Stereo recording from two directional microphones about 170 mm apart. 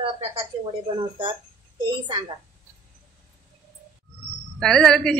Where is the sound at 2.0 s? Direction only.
25° right (ahead or behind).